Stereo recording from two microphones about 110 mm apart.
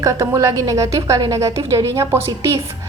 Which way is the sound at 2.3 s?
35° right (ahead or behind).